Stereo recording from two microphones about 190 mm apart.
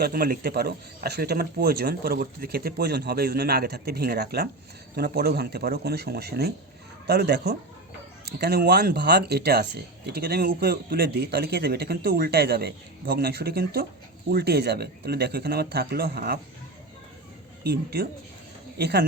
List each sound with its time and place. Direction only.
0.0 s speech: 55° right (ahead or behind)
17.6 s speech: 55° right (ahead or behind)